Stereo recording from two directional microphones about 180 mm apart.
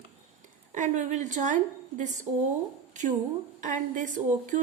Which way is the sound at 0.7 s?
40° right (ahead or behind).